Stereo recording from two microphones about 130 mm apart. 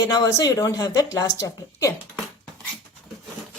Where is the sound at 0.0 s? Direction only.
30° left (ahead or behind).